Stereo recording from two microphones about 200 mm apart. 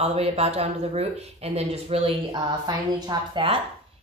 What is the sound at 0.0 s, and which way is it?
Speech, 30° right (ahead or behind).